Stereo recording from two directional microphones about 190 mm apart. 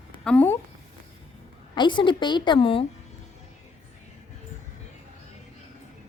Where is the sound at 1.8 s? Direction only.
25° left (ahead or behind).